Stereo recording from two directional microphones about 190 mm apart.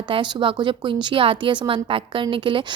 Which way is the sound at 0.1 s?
25° right (ahead or behind).